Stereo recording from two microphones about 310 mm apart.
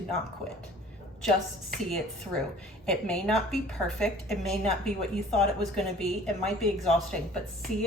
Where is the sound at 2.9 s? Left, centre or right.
Centre.